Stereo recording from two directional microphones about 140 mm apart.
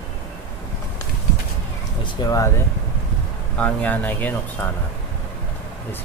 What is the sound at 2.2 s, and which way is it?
Speech, 25° left (ahead or behind).